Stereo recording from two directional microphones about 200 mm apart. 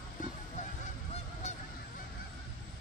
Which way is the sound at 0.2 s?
40° left (ahead or behind).